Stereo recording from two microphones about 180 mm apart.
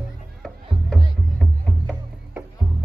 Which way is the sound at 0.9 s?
5° left (ahead or behind).